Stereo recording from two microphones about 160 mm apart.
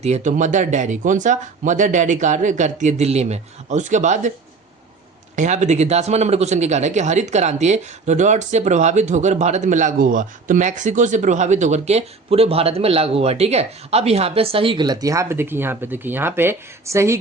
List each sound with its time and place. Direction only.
0.0 s speech: 45° right (ahead or behind)
5.4 s speech: 50° right (ahead or behind); by 17.2 s 20° right (ahead or behind)